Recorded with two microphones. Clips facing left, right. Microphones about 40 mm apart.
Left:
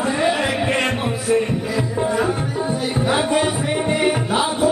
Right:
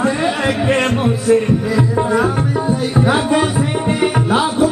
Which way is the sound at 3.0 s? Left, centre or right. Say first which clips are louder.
Right 4 dB; centre.